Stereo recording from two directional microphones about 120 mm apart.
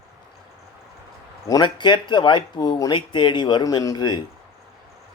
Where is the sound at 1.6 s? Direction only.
40° left (ahead or behind).